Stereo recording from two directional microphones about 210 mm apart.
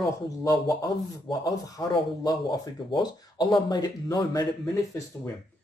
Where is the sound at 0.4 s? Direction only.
15° left (ahead or behind).